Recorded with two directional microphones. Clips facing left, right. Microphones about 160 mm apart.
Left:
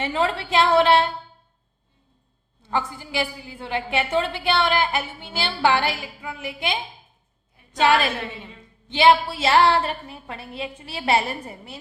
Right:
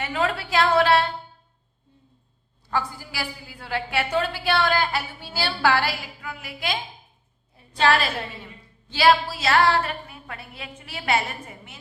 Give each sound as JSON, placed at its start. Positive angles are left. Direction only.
{"t": 0.0, "sound": "a woman's voice", "side_deg": 25}
{"t": 2.6, "sound": "a woman's voice", "side_deg": 20}
{"t": 8.9, "sound": "a woman's voice", "side_deg": 20}